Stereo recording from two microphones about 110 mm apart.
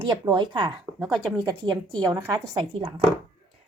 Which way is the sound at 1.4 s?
40° right (ahead or behind).